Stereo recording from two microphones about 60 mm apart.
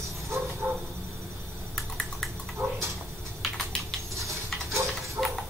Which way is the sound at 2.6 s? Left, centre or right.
Right.